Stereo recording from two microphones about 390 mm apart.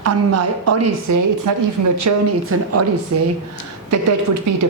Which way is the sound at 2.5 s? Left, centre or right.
Right.